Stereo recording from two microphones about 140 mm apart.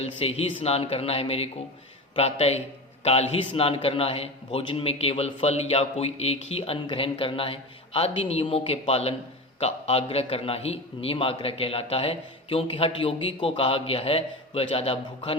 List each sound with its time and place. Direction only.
0.0 s a man's voice: 45° left (ahead or behind)